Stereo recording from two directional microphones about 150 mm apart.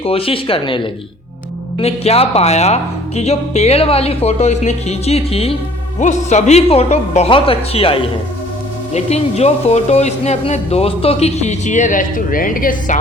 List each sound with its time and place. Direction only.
0.0 s speech: 40° left (ahead or behind)
1.8 s speech: 45° left (ahead or behind)
6.0 s speech: 50° left (ahead or behind)